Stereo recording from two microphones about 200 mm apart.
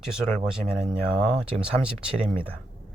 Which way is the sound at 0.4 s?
5° right (ahead or behind).